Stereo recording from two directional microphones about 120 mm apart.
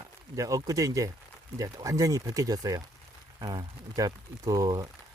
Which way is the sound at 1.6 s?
30° right (ahead or behind).